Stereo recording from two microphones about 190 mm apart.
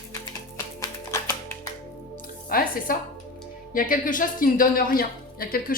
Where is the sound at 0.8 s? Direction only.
15° left (ahead or behind).